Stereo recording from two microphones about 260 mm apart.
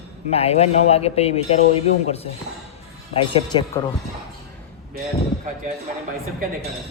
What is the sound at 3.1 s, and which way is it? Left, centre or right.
Speech, centre.